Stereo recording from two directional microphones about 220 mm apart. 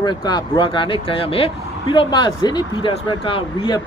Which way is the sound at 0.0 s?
20° left (ahead or behind).